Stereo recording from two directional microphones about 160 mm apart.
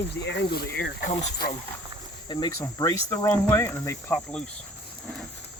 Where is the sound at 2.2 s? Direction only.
25° left (ahead or behind); by 4.4 s 10° left (ahead or behind).